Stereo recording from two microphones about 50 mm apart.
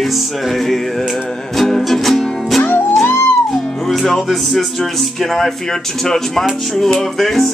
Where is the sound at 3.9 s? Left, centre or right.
Centre.